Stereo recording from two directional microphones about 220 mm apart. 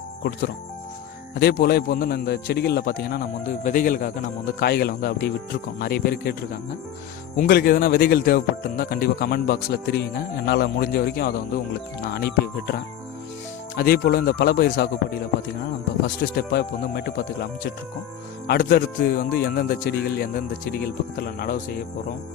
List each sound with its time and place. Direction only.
0.2 s speech: 45° left (ahead or behind)
7.3 s speech: 40° left (ahead or behind)
16.5 s speech: 45° left (ahead or behind)